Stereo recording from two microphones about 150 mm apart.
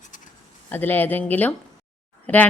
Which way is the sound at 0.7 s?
10° left (ahead or behind).